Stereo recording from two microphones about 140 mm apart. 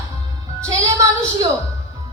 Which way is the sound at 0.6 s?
20° right (ahead or behind).